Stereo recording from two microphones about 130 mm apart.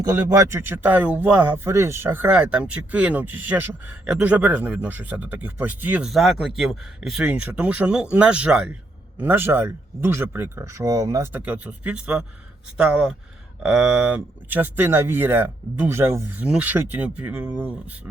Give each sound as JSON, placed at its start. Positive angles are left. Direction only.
{"t": 0.0, "sound": "speech", "side_deg": -30}
{"t": 6.1, "sound": "speech", "side_deg": 0}
{"t": 11.3, "sound": "speech", "side_deg": -15}